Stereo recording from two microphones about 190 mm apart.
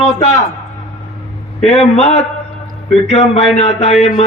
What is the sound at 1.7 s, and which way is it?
A man's voice, 35° left (ahead or behind).